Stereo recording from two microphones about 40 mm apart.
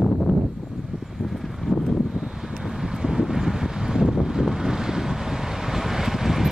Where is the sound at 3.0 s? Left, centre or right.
Centre.